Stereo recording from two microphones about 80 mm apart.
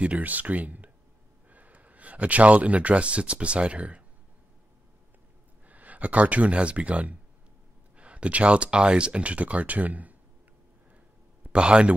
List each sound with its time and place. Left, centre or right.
0.0 s speech: centre
5.7 s speech: centre
11.4 s speech: centre